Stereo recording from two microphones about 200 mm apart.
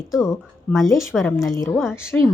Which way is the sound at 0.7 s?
Centre (ahead or behind).